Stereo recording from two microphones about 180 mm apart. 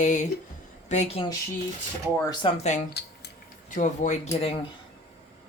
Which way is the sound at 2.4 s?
40° left (ahead or behind).